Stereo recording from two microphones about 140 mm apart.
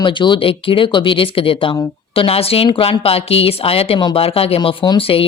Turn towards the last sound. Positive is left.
turn(degrees=35)  # may be behind; listen again after turning